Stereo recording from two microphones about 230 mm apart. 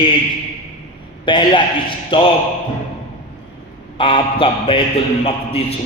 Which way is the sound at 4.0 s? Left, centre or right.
Left.